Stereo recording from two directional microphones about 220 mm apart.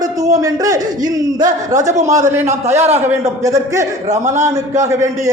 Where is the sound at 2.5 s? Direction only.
30° right (ahead or behind).